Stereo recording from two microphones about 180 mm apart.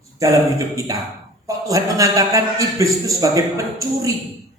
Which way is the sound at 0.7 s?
20° right (ahead or behind).